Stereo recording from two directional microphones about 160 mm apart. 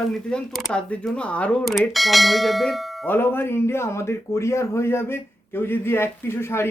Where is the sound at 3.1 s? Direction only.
15° left (ahead or behind).